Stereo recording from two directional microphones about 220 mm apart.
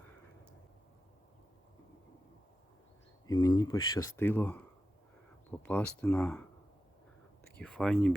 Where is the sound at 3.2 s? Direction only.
15° left (ahead or behind).